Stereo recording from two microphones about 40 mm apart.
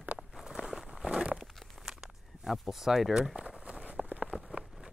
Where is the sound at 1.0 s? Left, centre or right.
Right.